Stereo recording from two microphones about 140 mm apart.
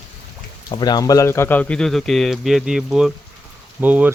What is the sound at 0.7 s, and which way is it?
Speech, 30° left (ahead or behind).